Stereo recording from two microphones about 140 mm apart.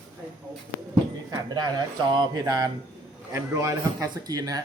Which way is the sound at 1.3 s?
30° right (ahead or behind).